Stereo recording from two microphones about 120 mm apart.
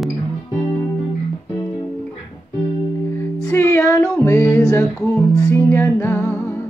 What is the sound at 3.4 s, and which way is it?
Music, 20° left (ahead or behind).